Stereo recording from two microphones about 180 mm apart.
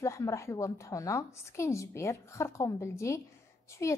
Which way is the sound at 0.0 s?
15° left (ahead or behind).